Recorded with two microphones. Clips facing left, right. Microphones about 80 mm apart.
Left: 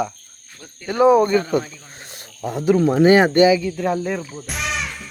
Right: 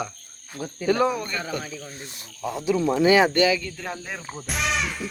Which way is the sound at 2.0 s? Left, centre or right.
Left.